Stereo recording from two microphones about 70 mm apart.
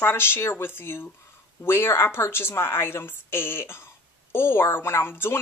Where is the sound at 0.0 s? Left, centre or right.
Left.